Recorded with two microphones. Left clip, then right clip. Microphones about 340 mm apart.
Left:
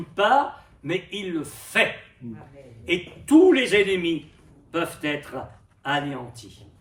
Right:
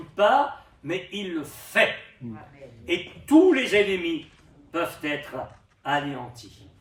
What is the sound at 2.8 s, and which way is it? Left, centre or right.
A man's voice, centre.